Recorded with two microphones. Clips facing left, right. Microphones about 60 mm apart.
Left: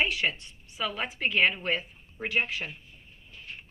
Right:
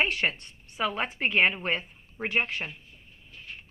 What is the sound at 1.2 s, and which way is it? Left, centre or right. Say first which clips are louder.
A woman's voice: right 1 dB; right.